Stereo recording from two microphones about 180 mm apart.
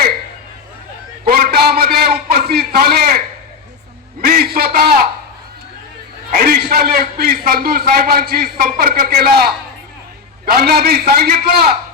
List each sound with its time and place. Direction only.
1.3 s a sound: 60° right (ahead or behind)
4.3 s a man's voice: 55° right (ahead or behind)
6.3 s a man's voice: 55° right (ahead or behind)